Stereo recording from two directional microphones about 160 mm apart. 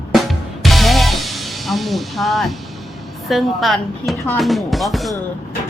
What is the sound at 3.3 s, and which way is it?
A woman's voice, centre (ahead or behind).